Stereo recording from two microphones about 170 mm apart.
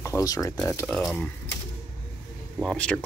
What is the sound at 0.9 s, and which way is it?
Speech, 5° left (ahead or behind).